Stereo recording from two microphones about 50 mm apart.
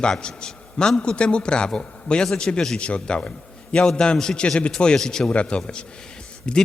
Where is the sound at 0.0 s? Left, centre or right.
Centre.